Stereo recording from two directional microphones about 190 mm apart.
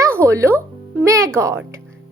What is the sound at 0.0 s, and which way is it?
Music, 15° right (ahead or behind).